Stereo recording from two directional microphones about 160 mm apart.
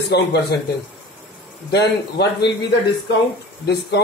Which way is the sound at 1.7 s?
90° left.